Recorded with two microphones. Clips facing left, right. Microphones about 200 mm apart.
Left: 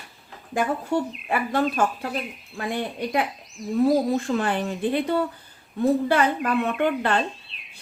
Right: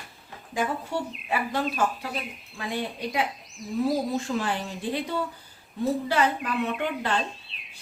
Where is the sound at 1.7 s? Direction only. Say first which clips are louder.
Left 3 dB; 55° left (ahead or behind).